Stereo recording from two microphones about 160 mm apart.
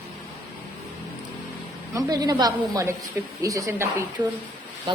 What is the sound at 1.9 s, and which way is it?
A woman's voice, 20° right (ahead or behind).